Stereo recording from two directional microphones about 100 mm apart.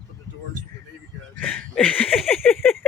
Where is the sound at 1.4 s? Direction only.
15° left (ahead or behind).